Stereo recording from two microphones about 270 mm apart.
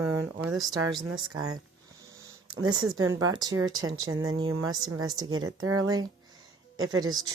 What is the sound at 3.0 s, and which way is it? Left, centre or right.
Speech, centre.